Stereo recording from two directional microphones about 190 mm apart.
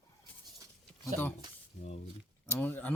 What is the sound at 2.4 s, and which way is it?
Speech, 10° left (ahead or behind).